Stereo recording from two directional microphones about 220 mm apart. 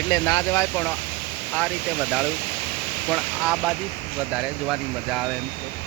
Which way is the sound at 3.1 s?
Centre (ahead or behind).